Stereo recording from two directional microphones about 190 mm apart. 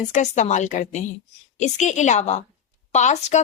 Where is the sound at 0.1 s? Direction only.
40° left (ahead or behind).